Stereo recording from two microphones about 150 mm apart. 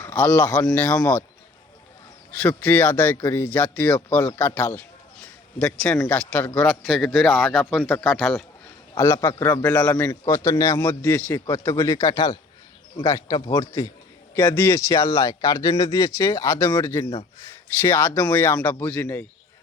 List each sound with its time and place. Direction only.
0.0 s speech: 10° left (ahead or behind)
2.4 s speech: 10° left (ahead or behind)
6.8 s speech: 5° right (ahead or behind)
9.2 s speech: 15° left (ahead or behind)
14.3 s speech: 15° left (ahead or behind)